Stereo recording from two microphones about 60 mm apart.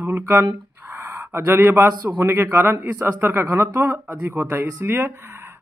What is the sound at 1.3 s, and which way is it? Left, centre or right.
Speech, right.